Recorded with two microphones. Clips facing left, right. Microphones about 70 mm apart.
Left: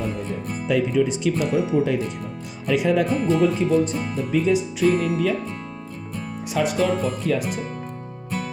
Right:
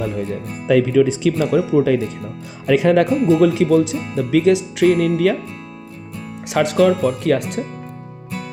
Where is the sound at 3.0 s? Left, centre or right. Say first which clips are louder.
Right 5 dB; right.